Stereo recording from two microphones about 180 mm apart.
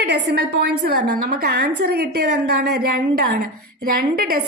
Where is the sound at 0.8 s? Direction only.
60° right (ahead or behind).